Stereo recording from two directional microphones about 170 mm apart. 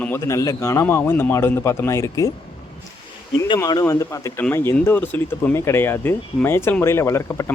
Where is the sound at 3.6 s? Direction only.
25° left (ahead or behind).